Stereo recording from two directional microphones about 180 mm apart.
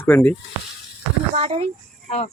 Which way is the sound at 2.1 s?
35° left (ahead or behind).